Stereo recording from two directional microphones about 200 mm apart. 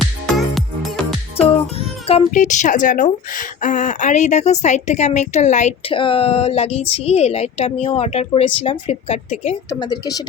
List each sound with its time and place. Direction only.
0.0 s music: centre (ahead or behind)
1.4 s a child's voice: 30° left (ahead or behind)
9.6 s speech: 20° left (ahead or behind)